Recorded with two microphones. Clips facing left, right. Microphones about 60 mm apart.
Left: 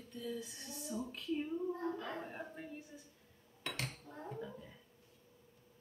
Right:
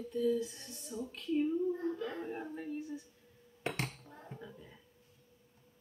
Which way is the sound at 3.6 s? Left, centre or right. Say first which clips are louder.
Right 5 dB; right.